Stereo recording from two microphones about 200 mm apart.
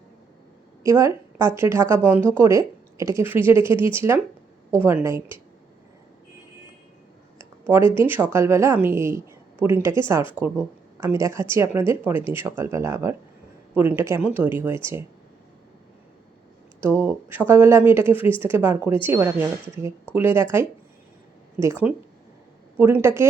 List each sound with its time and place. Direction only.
0.8 s speech: 15° right (ahead or behind)
3.7 s speech: 25° left (ahead or behind)
3.9 s speech: 10° right (ahead or behind)
7.3 s a sound: 10° right (ahead or behind)
7.9 s speech: 10° right (ahead or behind)
16.8 s speech: 10° right (ahead or behind)